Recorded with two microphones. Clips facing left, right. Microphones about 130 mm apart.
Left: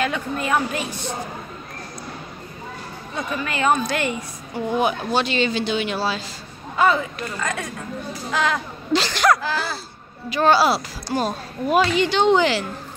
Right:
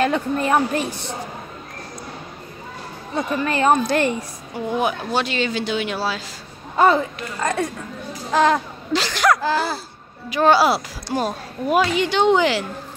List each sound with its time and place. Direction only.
0.0 s a woman's voice: 35° right (ahead or behind)
3.2 s a woman's voice: 35° right (ahead or behind)
4.7 s speech: 5° right (ahead or behind)
6.8 s a woman's voice: 35° right (ahead or behind)
8.9 s a woman's voice: 5° right (ahead or behind)
10.3 s a woman's voice: 15° right (ahead or behind)